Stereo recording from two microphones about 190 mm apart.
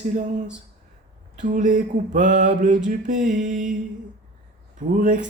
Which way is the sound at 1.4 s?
45° right (ahead or behind).